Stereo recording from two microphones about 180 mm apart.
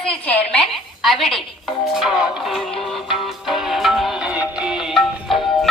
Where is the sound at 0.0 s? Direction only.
5° left (ahead or behind).